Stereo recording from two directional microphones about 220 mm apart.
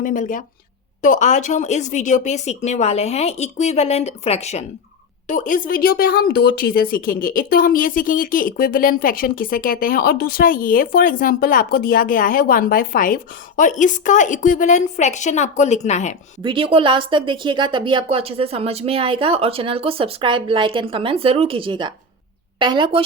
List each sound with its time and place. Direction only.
0.0 s a woman's voice: 35° left (ahead or behind)
16.4 s speech: 20° right (ahead or behind)